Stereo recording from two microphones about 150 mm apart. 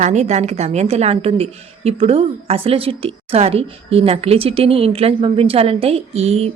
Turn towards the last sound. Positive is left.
turn(degrees=-45)  # may be behind; listen again after turning